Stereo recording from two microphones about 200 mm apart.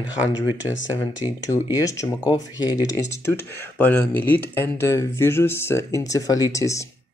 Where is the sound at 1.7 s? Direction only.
15° left (ahead or behind).